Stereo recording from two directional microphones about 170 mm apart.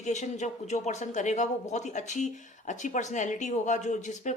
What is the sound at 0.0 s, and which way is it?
Speech, 45° left (ahead or behind).